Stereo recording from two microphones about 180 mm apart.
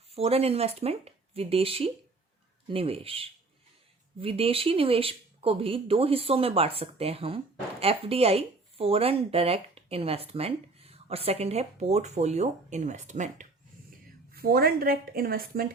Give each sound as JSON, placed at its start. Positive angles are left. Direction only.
{"t": 0.1, "sound": "speech", "side_deg": -35}
{"t": 14.3, "sound": "speech", "side_deg": -55}